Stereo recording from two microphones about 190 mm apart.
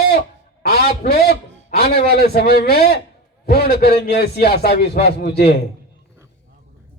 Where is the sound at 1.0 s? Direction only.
55° left (ahead or behind).